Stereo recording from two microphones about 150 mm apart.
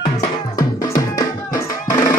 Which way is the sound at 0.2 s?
25° left (ahead or behind).